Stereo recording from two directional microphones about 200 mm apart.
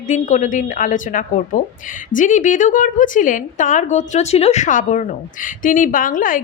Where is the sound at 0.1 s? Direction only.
35° left (ahead or behind).